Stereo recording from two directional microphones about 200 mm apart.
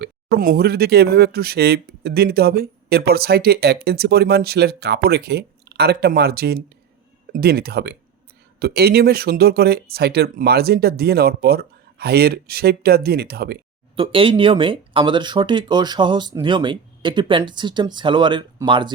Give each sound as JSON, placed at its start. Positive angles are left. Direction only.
{"t": 0.0, "sound": "speech", "side_deg": -50}
{"t": 13.9, "sound": "speech", "side_deg": -25}